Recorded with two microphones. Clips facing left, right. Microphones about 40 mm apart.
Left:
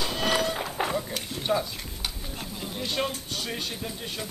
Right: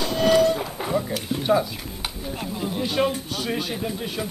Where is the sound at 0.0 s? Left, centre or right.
Centre.